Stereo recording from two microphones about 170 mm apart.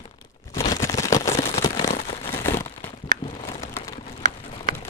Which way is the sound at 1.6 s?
20° left (ahead or behind).